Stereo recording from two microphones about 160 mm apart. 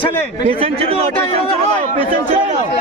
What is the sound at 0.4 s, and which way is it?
Speech, 40° right (ahead or behind).